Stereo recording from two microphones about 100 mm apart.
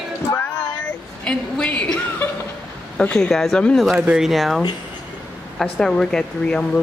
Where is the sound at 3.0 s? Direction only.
5° left (ahead or behind).